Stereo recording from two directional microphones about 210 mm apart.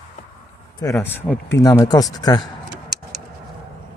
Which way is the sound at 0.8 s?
10° left (ahead or behind).